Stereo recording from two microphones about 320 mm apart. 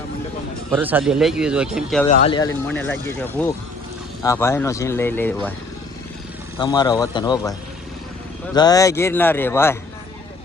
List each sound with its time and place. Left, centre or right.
0.7 s speech: centre
2.0 s speech: centre
6.6 s speech: centre
8.5 s speech: centre